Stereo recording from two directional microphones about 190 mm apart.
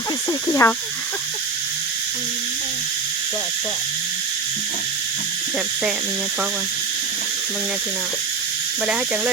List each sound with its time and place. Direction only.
0.4 s speech: 15° left (ahead or behind)